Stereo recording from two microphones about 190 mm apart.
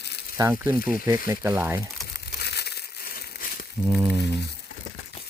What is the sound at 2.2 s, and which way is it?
Crushing, 60° left (ahead or behind).